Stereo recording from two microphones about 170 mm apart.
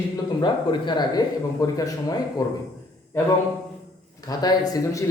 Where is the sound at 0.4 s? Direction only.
25° left (ahead or behind).